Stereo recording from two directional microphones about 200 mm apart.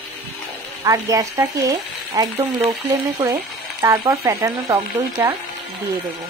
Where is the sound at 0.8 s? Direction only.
15° right (ahead or behind).